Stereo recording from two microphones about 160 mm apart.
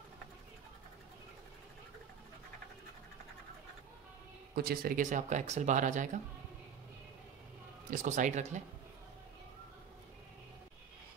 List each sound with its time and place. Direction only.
4.6 s speech: 70° right (ahead or behind); by 6.2 s 50° right (ahead or behind)
7.9 s speech: 55° right (ahead or behind)